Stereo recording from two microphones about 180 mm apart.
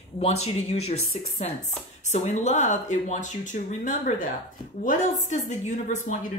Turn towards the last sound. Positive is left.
turn(degrees=45)  # may be behind; listen again after turning